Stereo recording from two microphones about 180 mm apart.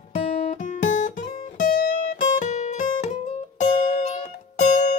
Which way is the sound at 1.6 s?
50° left (ahead or behind).